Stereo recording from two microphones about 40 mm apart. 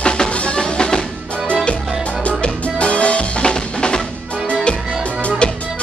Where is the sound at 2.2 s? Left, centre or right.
Left.